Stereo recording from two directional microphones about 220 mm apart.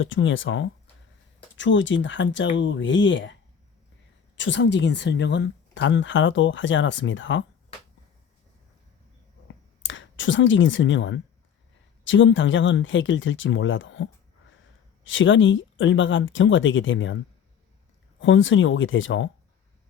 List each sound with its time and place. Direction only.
0.0 s speech: 60° left (ahead or behind)
4.4 s speech: 55° left (ahead or behind)
9.8 s speech: 60° left (ahead or behind)
18.2 s speech: 60° left (ahead or behind)